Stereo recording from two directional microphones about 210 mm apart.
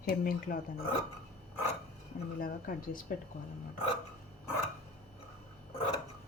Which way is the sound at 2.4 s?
40° left (ahead or behind).